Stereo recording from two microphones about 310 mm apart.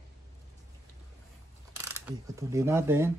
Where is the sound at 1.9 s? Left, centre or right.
Centre.